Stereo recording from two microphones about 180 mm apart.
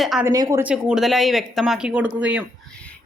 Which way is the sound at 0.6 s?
5° right (ahead or behind).